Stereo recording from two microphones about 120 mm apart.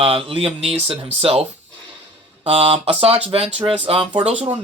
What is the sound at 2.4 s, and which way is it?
Speech, 55° right (ahead or behind).